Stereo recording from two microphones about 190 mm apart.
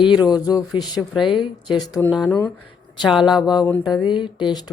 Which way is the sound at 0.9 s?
Centre (ahead or behind).